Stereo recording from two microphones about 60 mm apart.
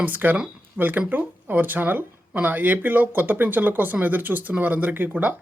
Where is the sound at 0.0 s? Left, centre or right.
Right.